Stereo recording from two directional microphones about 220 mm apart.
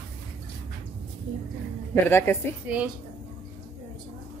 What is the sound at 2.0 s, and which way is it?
Speech, 10° left (ahead or behind).